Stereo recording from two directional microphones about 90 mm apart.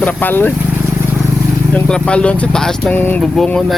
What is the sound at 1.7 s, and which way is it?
Speech, 10° left (ahead or behind).